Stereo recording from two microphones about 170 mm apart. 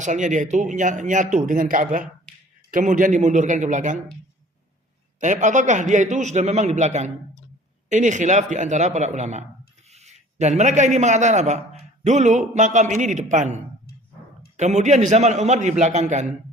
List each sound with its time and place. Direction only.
0.0 s speech: 45° right (ahead or behind)
5.2 s a man's voice: 45° right (ahead or behind)